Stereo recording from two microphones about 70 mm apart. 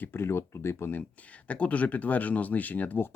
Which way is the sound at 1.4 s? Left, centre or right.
Centre.